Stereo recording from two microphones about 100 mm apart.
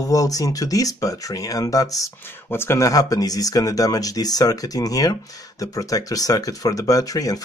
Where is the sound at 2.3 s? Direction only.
25° left (ahead or behind).